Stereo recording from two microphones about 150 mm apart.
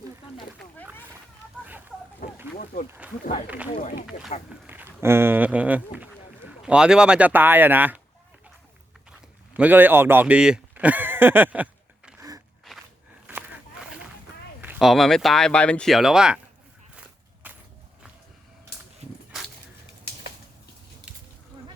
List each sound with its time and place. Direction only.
3.0 s speech: 10° right (ahead or behind)
3.8 s speech: 60° left (ahead or behind)
4.6 s speech: 15° right (ahead or behind)
9.6 s speech: 10° right (ahead or behind)
13.2 s a sound: 10° right (ahead or behind)
14.8 s speech: centre (ahead or behind)
17.4 s walk: 10° right (ahead or behind)
21.1 s a sound: 10° right (ahead or behind)